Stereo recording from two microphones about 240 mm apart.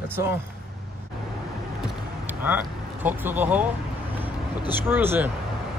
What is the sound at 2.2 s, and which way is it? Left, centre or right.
Vehicle, centre.